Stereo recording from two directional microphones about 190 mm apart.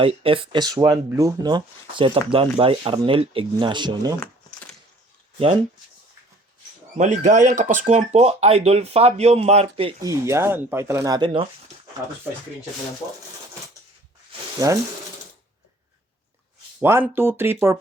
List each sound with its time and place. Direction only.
0.0 s speech: 30° right (ahead or behind)
6.9 s speech: 40° right (ahead or behind)
10.0 s speech: 15° right (ahead or behind)
16.8 s speech: 10° right (ahead or behind)